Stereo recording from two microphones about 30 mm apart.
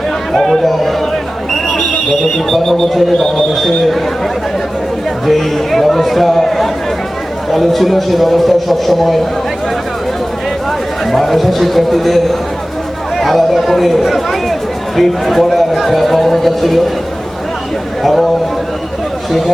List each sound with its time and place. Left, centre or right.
0.3 s a man's voice: centre
2.5 s a man's voice: centre
5.2 s a man's voice: centre
11.1 s a man's voice: centre
18.0 s a man's voice: centre